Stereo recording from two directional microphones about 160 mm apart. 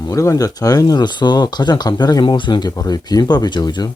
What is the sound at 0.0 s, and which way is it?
Speech, 20° left (ahead or behind).